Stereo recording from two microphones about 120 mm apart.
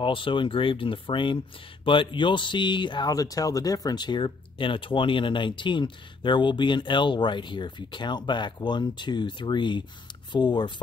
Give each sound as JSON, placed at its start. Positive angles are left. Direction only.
{"t": 0.0, "sound": "speech", "side_deg": 45}